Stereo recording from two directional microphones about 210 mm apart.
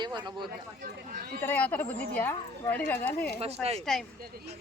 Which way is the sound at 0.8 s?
45° right (ahead or behind).